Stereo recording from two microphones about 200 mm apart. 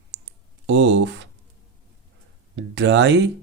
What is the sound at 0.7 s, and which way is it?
Speech, 65° right (ahead or behind).